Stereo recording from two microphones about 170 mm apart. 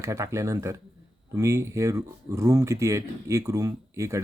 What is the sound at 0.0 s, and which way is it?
Speech, 15° right (ahead or behind).